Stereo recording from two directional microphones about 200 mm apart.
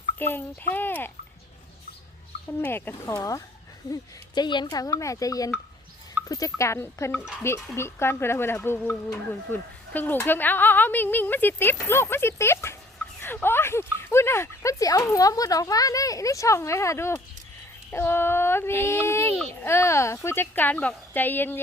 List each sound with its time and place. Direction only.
0.2 s speech: 10° left (ahead or behind)
2.5 s speech: 10° left (ahead or behind)